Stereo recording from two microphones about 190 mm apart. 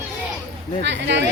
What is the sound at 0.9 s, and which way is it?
Speech, 65° right (ahead or behind).